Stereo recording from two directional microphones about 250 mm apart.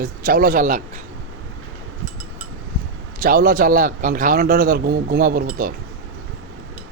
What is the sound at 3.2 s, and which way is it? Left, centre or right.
A man's voice, right.